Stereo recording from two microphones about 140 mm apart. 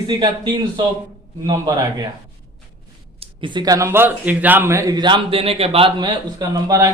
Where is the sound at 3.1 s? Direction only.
35° right (ahead or behind).